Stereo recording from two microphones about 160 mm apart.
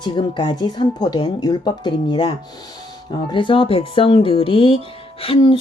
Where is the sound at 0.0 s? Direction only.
30° left (ahead or behind).